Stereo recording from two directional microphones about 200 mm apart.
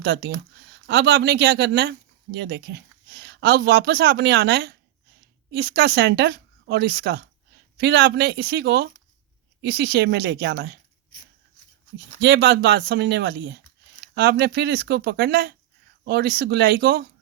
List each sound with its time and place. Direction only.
0.0 s speech: 60° right (ahead or behind)
12.2 s speech: 60° right (ahead or behind)